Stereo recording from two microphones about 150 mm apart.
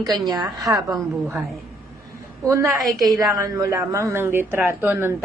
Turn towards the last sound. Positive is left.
turn(degrees=-15)  # may be behind; listen again after turning